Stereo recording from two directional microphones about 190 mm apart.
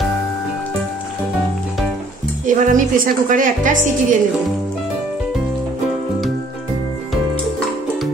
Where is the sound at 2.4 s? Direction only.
45° right (ahead or behind).